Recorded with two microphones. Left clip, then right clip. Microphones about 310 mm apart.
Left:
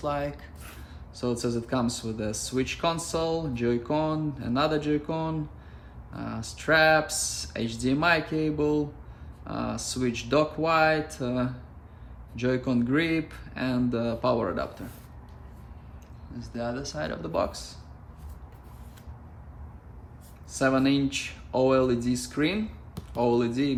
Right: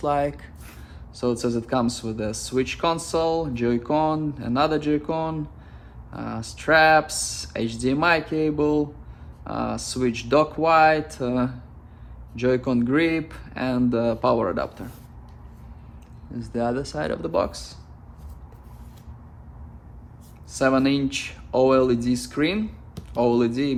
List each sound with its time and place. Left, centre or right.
1.1 s speech: right
16.5 s speech: centre
20.5 s speech: right